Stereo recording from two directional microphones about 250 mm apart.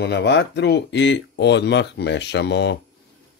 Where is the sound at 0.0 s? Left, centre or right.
Left.